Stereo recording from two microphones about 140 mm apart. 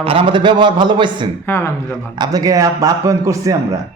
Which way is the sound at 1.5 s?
20° left (ahead or behind).